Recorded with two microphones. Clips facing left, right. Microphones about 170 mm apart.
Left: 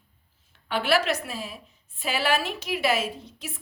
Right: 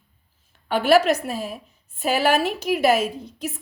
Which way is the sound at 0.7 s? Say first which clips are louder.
Right 7 dB; 45° right (ahead or behind).